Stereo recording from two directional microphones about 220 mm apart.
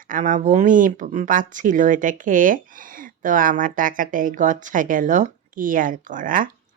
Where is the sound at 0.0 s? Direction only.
35° right (ahead or behind).